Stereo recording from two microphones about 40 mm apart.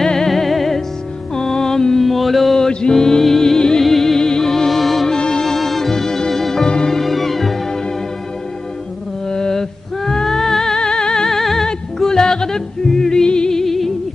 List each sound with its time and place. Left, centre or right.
0.0 s music: centre
0.3 s music: centre
2.0 s mantra: centre
2.9 s music: centre
5.1 s music: centre
6.7 s music: centre
7.0 s music: centre
9.3 s music: centre